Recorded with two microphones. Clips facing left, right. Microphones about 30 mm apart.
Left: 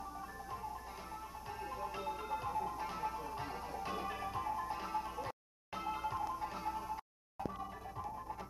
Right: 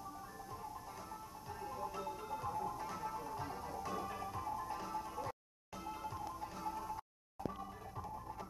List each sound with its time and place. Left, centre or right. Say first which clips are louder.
1.6 s music: left 1 dB; left